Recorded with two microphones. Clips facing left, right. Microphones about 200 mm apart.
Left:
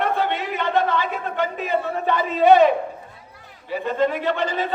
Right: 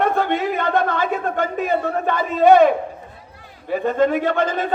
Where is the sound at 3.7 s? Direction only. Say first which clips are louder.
Right 4 dB; 50° right (ahead or behind).